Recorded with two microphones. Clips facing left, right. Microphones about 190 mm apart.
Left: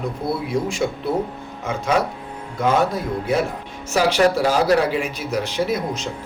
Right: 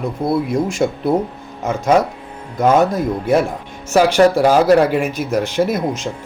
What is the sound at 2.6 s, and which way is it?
Speech, 45° right (ahead or behind).